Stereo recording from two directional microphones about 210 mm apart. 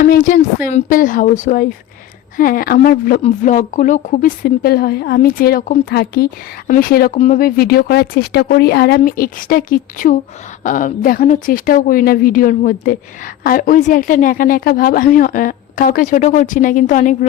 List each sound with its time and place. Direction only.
0.0 s a woman's voice: 40° left (ahead or behind)